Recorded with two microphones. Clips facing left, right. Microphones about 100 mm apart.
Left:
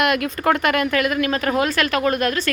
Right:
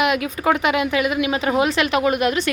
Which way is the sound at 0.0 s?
10° right (ahead or behind).